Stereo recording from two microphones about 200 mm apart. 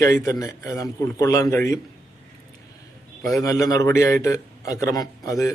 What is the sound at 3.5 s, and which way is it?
A man's voice, 15° left (ahead or behind).